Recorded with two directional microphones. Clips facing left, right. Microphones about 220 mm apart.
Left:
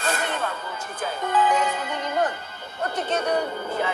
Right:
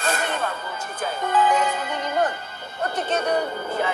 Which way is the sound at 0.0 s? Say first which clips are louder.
Right 1 dB; 45° right (ahead or behind).